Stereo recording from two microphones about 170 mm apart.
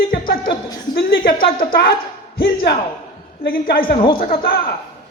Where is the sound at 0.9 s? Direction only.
60° left (ahead or behind).